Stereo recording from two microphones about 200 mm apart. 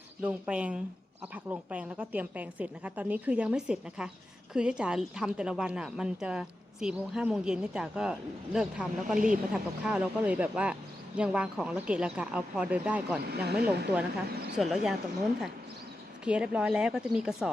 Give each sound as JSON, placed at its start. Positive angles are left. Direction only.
{"t": 0.2, "sound": "a woman's voice", "side_deg": -5}
{"t": 9.1, "sound": "speech", "side_deg": -45}
{"t": 9.5, "sound": "a woman's voice", "side_deg": -5}
{"t": 13.2, "sound": "speech", "side_deg": -55}
{"t": 14.5, "sound": "a woman's voice", "side_deg": 0}
{"t": 16.2, "sound": "a woman's voice", "side_deg": -5}